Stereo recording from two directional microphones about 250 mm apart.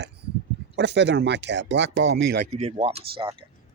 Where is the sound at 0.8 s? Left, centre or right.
Right.